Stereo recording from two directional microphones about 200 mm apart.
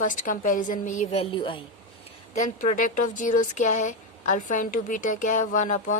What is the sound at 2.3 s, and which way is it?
Speech, 40° left (ahead or behind).